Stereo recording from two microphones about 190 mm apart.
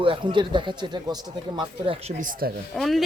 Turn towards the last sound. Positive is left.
turn(degrees=0)  # may be behind; listen again after turning